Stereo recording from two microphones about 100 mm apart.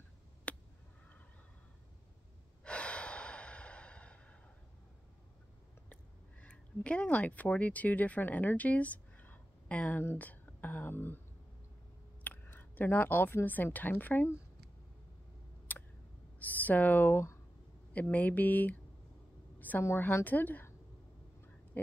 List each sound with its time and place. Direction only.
0.5 s a sound: 15° left (ahead or behind)
2.6 s breathing: 10° left (ahead or behind)
6.4 s speech: 10° left (ahead or behind)
12.2 s speech: 20° left (ahead or behind)
15.7 s a sound: 15° left (ahead or behind)
16.3 s speech: 15° left (ahead or behind)
19.8 s a woman's voice: 25° left (ahead or behind)